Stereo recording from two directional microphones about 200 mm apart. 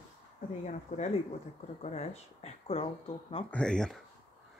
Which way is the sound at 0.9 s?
35° left (ahead or behind).